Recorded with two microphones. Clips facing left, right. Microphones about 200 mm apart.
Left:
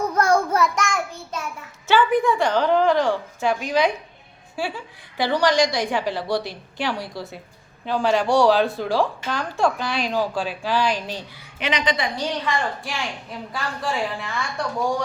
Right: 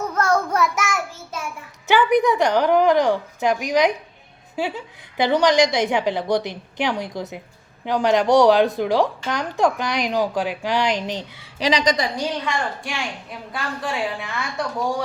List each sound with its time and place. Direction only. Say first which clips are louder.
0.1 s child singing: even; 10° left (ahead or behind)
0.5 s child singing: even; 5° right (ahead or behind)
1.9 s a woman's voice: right 2 dB; 20° right (ahead or behind)
11.6 s a woman's voice: right 4 dB; 35° right (ahead or behind)
12.5 s a woman's voice: even; centre (ahead or behind)